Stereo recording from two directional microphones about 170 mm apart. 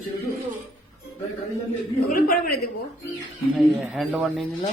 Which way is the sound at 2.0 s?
60° left (ahead or behind).